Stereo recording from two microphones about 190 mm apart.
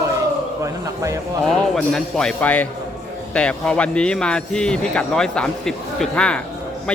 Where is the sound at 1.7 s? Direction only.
5° left (ahead or behind).